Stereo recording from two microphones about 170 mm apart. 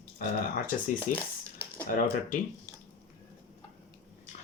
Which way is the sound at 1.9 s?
50° left (ahead or behind).